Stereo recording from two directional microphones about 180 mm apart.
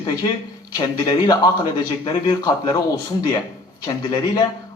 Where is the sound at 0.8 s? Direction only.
25° left (ahead or behind).